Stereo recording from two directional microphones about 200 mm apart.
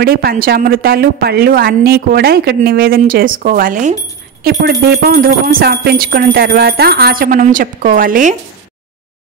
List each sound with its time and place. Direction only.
0.0 s speech: 50° right (ahead or behind)